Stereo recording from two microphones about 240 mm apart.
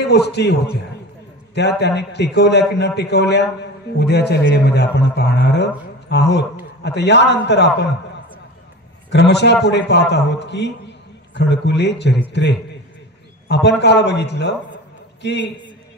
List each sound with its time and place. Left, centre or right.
0.0 s a man's voice: left
9.1 s a man's voice: left